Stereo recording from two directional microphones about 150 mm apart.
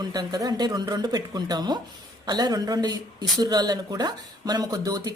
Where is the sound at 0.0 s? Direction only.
25° right (ahead or behind).